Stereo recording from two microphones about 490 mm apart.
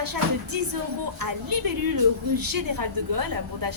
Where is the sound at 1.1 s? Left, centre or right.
Right.